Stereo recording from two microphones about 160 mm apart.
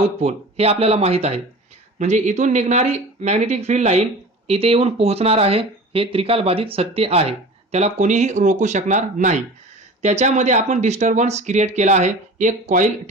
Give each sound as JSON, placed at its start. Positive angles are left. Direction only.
{"t": 0.0, "sound": "speech", "side_deg": -40}